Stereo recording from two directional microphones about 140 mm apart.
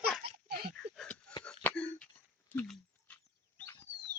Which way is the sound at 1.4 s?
10° left (ahead or behind).